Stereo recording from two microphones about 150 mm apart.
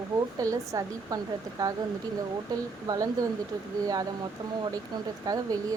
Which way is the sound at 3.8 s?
25° right (ahead or behind).